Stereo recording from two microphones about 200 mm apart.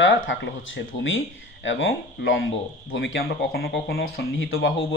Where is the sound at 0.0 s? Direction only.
70° left (ahead or behind); by 4.0 s 55° left (ahead or behind).